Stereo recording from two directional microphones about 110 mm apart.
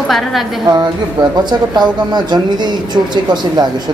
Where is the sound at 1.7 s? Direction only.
40° right (ahead or behind).